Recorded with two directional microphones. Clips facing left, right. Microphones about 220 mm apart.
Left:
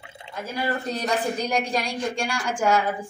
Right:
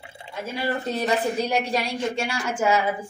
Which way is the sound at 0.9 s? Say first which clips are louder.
Right 2 dB; 5° right (ahead or behind).